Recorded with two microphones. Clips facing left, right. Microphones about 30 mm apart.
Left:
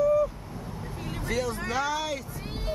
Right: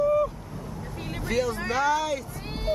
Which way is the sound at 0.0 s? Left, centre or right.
Right.